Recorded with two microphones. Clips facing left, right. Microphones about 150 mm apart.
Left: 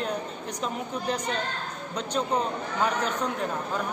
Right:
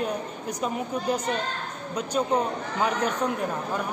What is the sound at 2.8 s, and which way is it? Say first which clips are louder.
Speech: right 2 dB; 10° right (ahead or behind).